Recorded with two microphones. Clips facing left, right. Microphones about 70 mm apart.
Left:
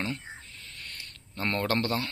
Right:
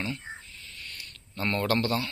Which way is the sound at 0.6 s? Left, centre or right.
Left.